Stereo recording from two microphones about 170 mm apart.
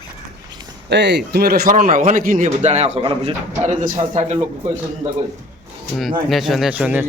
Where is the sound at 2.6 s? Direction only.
40° right (ahead or behind).